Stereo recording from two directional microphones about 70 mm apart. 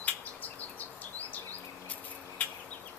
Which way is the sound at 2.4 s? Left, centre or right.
Left.